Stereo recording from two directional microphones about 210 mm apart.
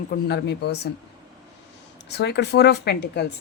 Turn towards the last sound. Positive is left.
turn(degrees=50)  # may be behind; listen again after turning